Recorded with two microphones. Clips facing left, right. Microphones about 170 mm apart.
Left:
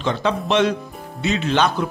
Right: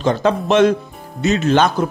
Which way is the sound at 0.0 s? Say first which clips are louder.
Right 5 dB; 45° right (ahead or behind).